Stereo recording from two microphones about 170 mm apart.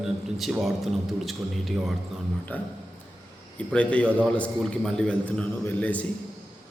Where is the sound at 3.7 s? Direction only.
5° left (ahead or behind).